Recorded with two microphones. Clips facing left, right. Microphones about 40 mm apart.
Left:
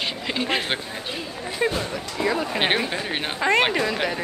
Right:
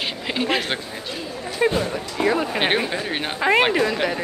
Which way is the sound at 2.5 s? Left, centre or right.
Centre.